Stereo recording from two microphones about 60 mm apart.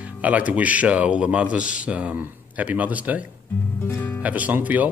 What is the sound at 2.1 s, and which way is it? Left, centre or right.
Speech, right.